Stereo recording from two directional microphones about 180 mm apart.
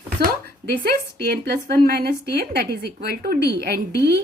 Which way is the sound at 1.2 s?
60° right (ahead or behind).